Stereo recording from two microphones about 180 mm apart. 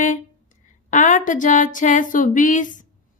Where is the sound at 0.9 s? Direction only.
45° left (ahead or behind).